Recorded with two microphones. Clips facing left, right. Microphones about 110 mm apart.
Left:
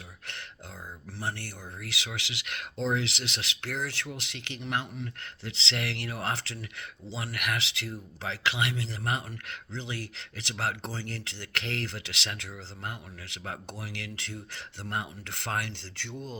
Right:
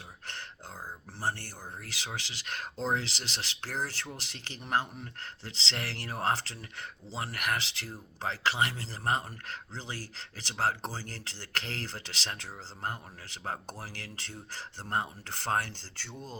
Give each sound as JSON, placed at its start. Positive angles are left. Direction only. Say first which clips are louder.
{"t": 1.2, "sound": "speech", "louder": "right 1 dB", "side_deg": -35}